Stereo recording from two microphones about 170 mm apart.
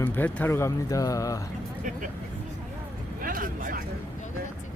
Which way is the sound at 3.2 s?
55° right (ahead or behind).